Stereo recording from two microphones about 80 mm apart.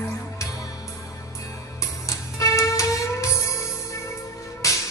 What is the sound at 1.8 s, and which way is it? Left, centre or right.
Music, left.